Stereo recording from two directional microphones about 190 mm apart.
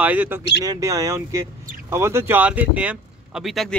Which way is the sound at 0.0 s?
10° right (ahead or behind).